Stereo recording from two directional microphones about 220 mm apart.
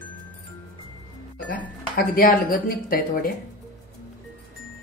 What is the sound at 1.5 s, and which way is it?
Speech, 40° left (ahead or behind).